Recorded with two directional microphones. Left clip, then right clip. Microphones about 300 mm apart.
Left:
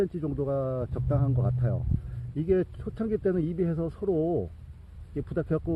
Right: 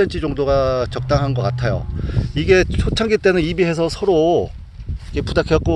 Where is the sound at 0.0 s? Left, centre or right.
Centre.